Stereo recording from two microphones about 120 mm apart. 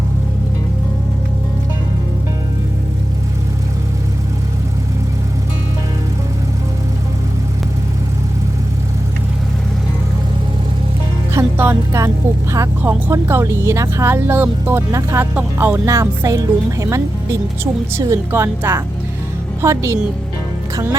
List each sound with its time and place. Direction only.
11.5 s speech: 15° right (ahead or behind)
15.4 s music: 15° right (ahead or behind)
15.9 s speech: 25° right (ahead or behind)
18.3 s speech: 20° right (ahead or behind)